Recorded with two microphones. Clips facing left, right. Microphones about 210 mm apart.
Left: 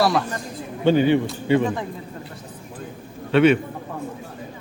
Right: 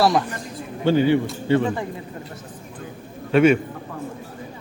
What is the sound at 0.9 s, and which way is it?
Speech, 20° left (ahead or behind).